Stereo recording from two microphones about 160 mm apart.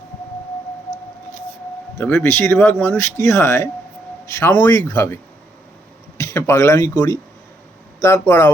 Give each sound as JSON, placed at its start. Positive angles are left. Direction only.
{"t": 2.2, "sound": "speech", "side_deg": 15}